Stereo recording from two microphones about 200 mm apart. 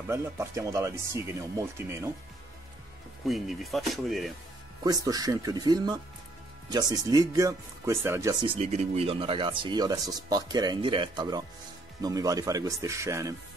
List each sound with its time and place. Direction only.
0.1 s speech: 15° right (ahead or behind)
3.3 s speech: centre (ahead or behind)
4.8 s speech: 20° right (ahead or behind)